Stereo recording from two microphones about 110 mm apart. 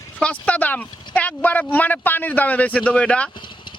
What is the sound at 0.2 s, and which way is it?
Speech, 10° left (ahead or behind).